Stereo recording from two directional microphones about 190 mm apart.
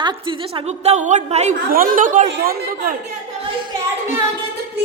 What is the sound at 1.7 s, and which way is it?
Speech, 45° right (ahead or behind).